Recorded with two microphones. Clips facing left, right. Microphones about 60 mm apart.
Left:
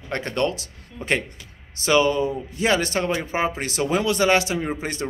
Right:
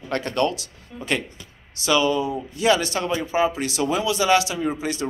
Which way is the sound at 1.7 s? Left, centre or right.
Left.